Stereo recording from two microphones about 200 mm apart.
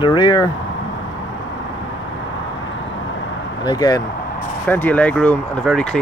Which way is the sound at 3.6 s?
20° left (ahead or behind).